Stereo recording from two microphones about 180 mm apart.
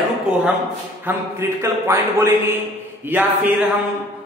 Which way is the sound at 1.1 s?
15° right (ahead or behind).